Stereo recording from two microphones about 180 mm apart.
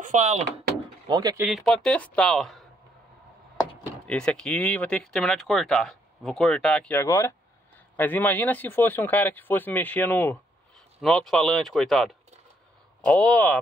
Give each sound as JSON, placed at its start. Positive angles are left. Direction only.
{"t": 0.0, "sound": "speech", "side_deg": -40}
{"t": 1.0, "sound": "speech", "side_deg": -20}
{"t": 1.4, "sound": "speech", "side_deg": 0}
{"t": 4.1, "sound": "speech", "side_deg": 5}